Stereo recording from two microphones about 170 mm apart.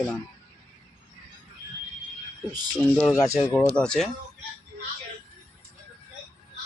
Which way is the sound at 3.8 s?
5° left (ahead or behind).